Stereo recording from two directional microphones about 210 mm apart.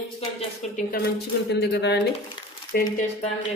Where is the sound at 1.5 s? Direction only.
50° left (ahead or behind).